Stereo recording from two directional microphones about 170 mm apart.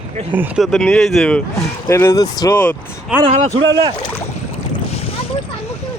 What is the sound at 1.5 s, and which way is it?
Speech, 15° left (ahead or behind).